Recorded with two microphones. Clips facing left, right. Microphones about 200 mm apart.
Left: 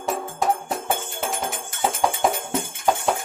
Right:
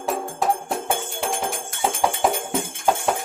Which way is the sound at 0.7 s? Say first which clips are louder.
Right 1 dB; centre (ahead or behind).